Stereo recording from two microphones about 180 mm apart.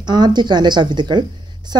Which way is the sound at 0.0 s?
25° right (ahead or behind).